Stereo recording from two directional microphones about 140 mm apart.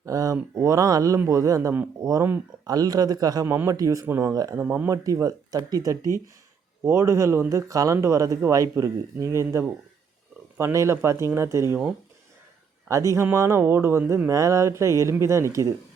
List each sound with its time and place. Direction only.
0.0 s a man's voice: 25° right (ahead or behind)
12.9 s a man's voice: 20° right (ahead or behind)